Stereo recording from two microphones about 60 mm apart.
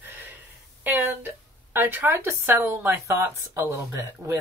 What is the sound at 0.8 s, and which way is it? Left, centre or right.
Speech, right.